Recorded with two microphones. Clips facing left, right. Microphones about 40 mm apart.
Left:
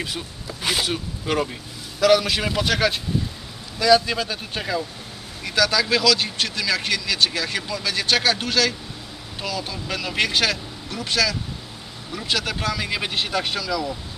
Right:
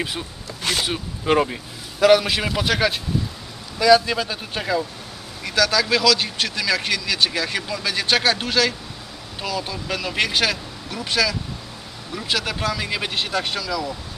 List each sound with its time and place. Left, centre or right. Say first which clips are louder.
0.0 s a man's voice: right 2 dB; centre
0.4 s a sound: even; centre
0.9 s a man's voice: right 4 dB; centre